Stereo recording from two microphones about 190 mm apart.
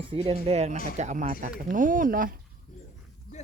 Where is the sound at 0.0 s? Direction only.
30° right (ahead or behind); by 2.4 s 45° right (ahead or behind).